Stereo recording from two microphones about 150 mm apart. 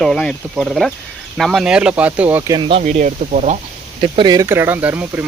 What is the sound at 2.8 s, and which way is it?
Speech, 55° right (ahead or behind).